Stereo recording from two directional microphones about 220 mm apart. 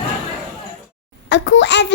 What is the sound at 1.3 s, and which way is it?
Speech, 50° left (ahead or behind).